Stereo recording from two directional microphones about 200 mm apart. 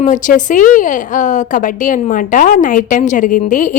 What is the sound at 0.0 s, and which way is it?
A woman's voice, 40° left (ahead or behind).